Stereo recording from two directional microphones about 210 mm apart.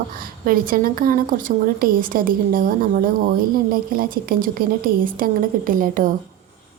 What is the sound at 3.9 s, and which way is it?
A woman's voice, 45° right (ahead or behind).